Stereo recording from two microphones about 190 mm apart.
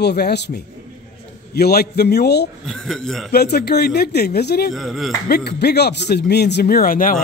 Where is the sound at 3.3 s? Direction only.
55° left (ahead or behind).